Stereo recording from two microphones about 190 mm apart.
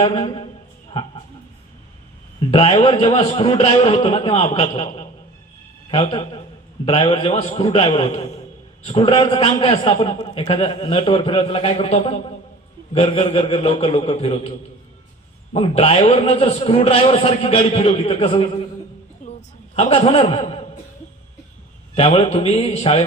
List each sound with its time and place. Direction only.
0.0 s a man's voice: 25° left (ahead or behind)
2.5 s a man's voice: 30° left (ahead or behind)
15.5 s a man's voice: 30° left (ahead or behind)
19.2 s a sound: 35° left (ahead or behind)
21.9 s a man's voice: 30° left (ahead or behind)